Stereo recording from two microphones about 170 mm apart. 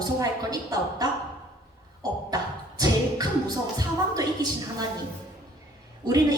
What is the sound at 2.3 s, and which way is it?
Beatboxing, 20° right (ahead or behind).